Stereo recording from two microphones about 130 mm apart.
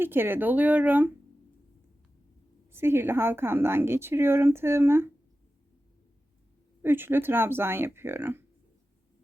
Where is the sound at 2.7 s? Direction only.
20° right (ahead or behind).